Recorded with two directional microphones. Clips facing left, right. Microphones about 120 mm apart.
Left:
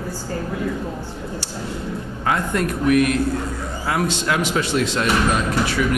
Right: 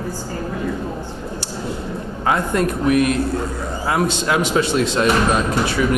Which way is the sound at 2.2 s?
25° right (ahead or behind).